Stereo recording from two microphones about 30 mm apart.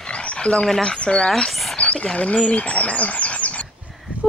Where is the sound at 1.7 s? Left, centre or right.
Left.